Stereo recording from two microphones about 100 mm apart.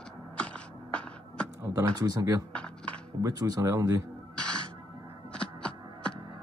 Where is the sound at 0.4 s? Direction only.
10° left (ahead or behind).